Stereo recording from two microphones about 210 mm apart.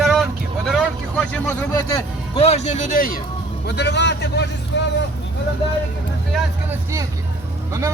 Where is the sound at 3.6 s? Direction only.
55° left (ahead or behind).